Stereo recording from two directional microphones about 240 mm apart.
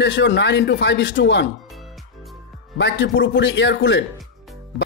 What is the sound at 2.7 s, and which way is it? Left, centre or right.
A man's voice, left.